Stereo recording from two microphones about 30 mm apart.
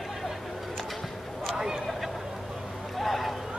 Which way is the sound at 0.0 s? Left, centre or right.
Centre.